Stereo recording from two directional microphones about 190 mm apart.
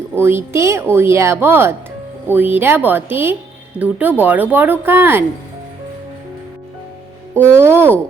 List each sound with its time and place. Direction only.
0.2 s speech: 10° right (ahead or behind)
7.3 s speech: 10° right (ahead or behind)